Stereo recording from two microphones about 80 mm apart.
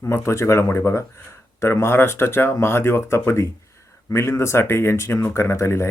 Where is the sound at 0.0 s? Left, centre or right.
Left.